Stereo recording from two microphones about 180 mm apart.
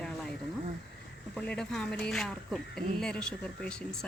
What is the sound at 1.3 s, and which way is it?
Speech, 5° left (ahead or behind).